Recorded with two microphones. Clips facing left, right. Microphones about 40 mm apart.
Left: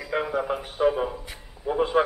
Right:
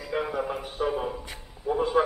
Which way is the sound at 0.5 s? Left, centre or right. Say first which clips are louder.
Left 5 dB; centre.